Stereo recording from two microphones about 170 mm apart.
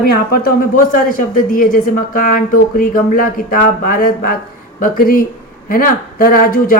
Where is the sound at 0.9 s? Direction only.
55° left (ahead or behind).